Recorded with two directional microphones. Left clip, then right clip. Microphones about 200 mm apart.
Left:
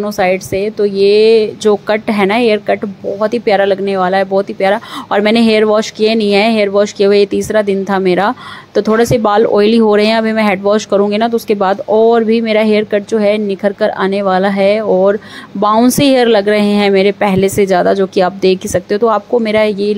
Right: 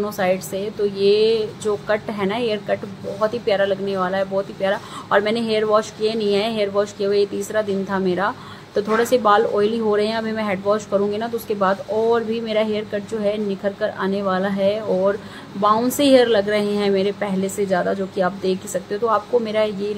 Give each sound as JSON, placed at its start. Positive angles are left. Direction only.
{"t": 0.0, "sound": "a woman's voice", "side_deg": 35}